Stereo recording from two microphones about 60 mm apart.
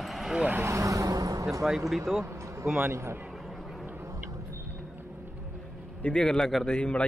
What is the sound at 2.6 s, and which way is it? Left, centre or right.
Speech, right.